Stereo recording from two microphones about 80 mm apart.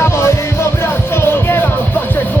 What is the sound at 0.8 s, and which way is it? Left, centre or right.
Music, left.